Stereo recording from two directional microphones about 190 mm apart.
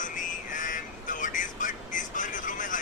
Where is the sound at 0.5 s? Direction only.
45° left (ahead or behind).